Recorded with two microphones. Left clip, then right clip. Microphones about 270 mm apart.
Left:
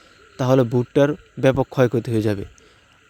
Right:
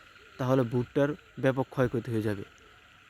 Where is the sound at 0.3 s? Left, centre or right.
Left.